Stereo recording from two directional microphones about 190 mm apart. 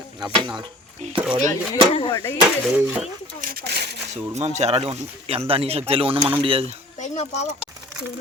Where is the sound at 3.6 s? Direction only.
60° right (ahead or behind).